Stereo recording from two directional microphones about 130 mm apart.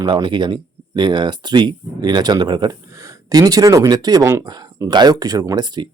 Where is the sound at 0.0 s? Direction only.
40° right (ahead or behind).